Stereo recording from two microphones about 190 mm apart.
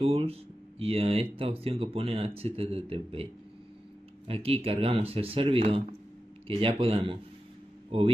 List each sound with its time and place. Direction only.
0.0 s speech: 30° right (ahead or behind)
4.3 s speech: 30° right (ahead or behind)